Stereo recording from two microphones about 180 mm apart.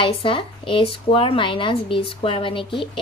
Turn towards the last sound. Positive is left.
turn(degrees=30)  # may be behind; listen again after turning